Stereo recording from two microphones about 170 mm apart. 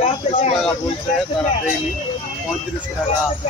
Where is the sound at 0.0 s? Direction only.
35° left (ahead or behind).